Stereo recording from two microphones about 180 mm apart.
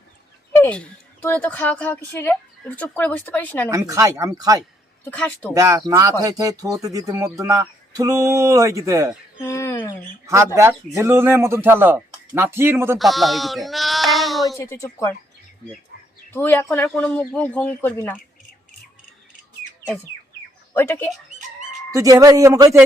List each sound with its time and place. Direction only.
0.5 s a woman's voice: 10° left (ahead or behind)
3.7 s speech: 20° right (ahead or behind)
5.0 s a woman's voice: 10° left (ahead or behind)
5.5 s speech: 20° right (ahead or behind)
9.4 s a woman's voice: 15° left (ahead or behind)
10.2 s a man's voice: 15° right (ahead or behind)
13.0 s speech: centre (ahead or behind)
14.6 s a woman's voice: 15° left (ahead or behind)
16.3 s a woman's voice: 10° left (ahead or behind)
20.7 s a woman's voice: 10° left (ahead or behind)
21.9 s speech: 20° right (ahead or behind)